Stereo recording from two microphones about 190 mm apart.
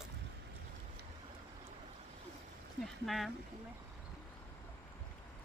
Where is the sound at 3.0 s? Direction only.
Centre (ahead or behind).